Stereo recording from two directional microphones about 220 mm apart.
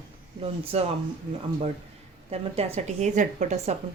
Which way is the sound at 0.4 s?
25° right (ahead or behind).